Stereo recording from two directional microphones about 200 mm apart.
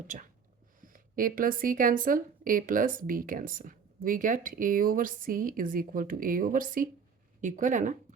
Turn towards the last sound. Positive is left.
turn(degrees=-40)  # may be behind; listen again after turning